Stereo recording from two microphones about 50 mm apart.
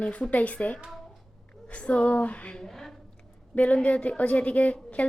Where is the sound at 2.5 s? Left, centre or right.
Centre.